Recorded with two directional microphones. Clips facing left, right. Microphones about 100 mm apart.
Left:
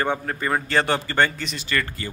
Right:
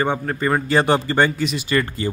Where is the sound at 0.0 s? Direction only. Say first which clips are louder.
Right 4 dB; 5° right (ahead or behind).